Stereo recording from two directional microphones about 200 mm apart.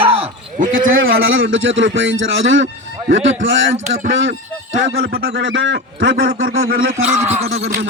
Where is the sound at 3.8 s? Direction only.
45° right (ahead or behind).